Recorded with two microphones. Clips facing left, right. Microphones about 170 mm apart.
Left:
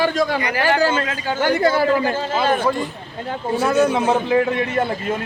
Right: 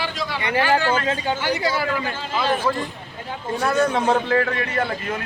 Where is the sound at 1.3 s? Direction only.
50° left (ahead or behind).